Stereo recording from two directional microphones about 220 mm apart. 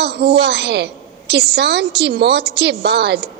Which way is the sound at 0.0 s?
50° right (ahead or behind).